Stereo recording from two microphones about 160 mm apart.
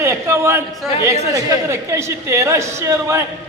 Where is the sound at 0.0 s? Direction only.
15° right (ahead or behind).